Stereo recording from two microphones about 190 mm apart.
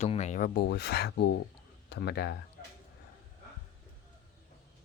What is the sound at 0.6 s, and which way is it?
Speech, 60° left (ahead or behind).